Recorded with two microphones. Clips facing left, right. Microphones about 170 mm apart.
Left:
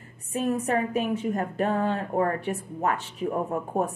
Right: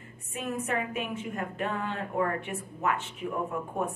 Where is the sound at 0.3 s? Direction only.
35° left (ahead or behind).